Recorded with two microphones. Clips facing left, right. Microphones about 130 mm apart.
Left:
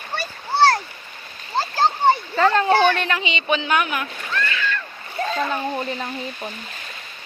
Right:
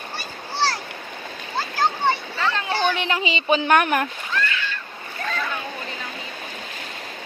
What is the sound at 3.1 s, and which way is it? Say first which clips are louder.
Speech: right 1 dB; 30° right (ahead or behind).